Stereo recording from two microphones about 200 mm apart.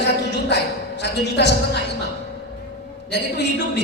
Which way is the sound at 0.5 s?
55° left (ahead or behind).